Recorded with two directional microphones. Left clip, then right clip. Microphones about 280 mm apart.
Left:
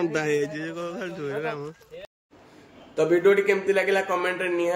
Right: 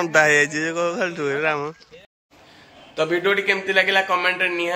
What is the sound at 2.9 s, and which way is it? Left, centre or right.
A man's voice, centre.